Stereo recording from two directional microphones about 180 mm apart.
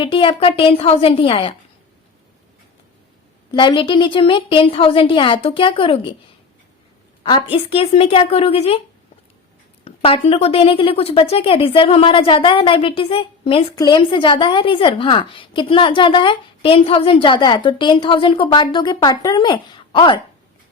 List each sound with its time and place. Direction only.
0.0 s a woman's voice: 30° left (ahead or behind)
3.5 s a woman's voice: 25° left (ahead or behind)
7.2 s a woman's voice: 30° left (ahead or behind)
9.8 s a woman's voice: 30° left (ahead or behind)